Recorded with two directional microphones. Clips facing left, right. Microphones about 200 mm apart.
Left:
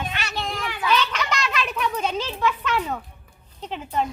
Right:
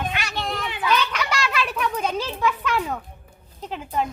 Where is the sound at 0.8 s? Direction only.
10° right (ahead or behind).